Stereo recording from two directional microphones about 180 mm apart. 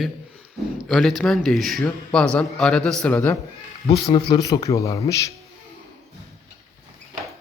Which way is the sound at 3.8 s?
30° left (ahead or behind).